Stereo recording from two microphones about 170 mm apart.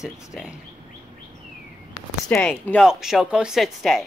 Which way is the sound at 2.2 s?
5° left (ahead or behind).